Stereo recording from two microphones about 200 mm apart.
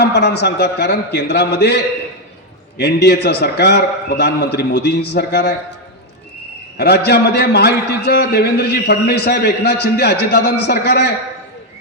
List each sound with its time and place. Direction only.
0.0 s a man's voice: 55° left (ahead or behind)
6.7 s a man's voice: 55° left (ahead or behind)